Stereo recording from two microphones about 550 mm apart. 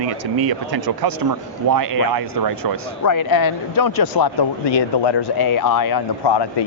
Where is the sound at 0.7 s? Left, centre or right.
Right.